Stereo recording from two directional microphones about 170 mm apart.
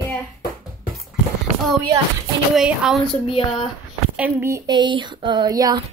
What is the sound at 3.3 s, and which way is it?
Speech, 30° left (ahead or behind).